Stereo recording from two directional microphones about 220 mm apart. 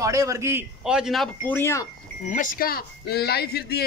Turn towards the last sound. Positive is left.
turn(degrees=45)  # may be behind; listen again after turning